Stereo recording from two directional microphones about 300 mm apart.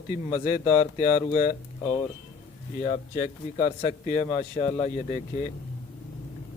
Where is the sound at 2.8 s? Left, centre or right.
Left.